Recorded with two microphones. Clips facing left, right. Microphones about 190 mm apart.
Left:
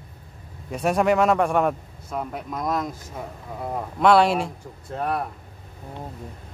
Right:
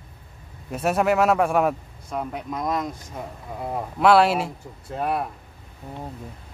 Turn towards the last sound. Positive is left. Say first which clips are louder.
# right 1 dB
turn(degrees=-5)  # may be behind; listen again after turning